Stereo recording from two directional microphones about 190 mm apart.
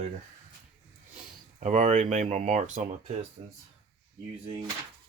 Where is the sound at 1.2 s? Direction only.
35° right (ahead or behind).